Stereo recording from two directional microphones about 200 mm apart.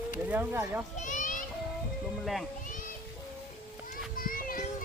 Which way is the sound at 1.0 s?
40° left (ahead or behind).